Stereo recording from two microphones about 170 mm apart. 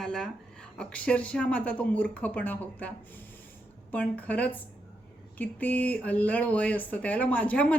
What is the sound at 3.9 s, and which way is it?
Speech, 10° left (ahead or behind).